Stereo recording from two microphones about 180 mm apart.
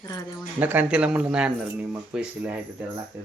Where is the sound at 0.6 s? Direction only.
10° right (ahead or behind).